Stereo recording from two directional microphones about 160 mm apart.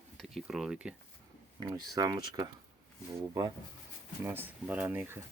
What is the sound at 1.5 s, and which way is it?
Speech, 25° right (ahead or behind).